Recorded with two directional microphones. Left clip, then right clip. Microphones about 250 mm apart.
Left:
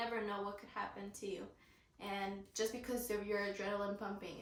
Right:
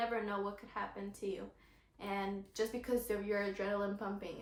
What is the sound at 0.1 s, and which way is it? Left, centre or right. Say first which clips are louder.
Speech: right 3 dB; centre.